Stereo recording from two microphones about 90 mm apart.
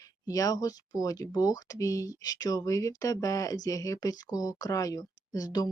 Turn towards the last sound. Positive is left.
turn(degrees=45)  # may be behind; listen again after turning